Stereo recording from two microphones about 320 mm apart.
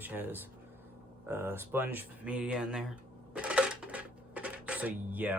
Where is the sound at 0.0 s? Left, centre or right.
Centre.